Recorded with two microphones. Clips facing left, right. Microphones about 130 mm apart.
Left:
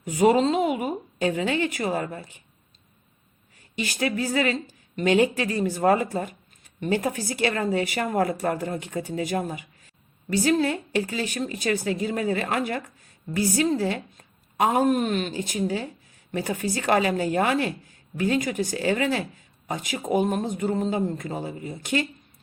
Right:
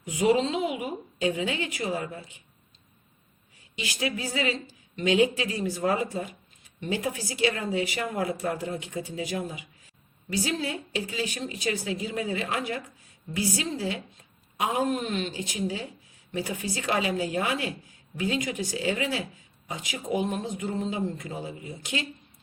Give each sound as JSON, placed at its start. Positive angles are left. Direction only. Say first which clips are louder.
{"t": 0.0, "sound": "a woman's voice", "louder": "left 4 dB", "side_deg": 45}
{"t": 3.8, "sound": "a woman's voice", "louder": "left 5 dB", "side_deg": 50}